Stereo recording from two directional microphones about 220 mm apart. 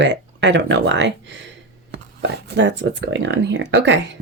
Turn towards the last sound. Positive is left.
turn(degrees=-55)  # may be behind; listen again after turning